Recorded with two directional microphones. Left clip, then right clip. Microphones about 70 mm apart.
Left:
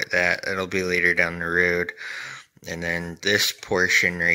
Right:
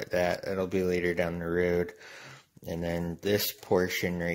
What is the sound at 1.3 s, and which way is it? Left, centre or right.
Speech, centre.